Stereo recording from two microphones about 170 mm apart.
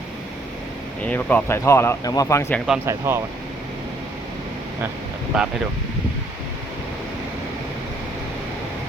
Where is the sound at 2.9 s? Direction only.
15° right (ahead or behind).